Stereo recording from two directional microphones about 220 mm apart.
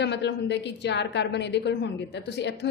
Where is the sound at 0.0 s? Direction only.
50° left (ahead or behind).